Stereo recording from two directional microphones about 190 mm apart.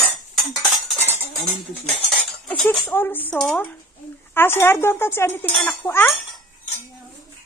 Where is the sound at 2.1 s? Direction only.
10° left (ahead or behind).